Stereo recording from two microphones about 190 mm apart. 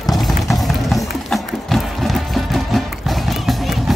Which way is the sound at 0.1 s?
Centre (ahead or behind).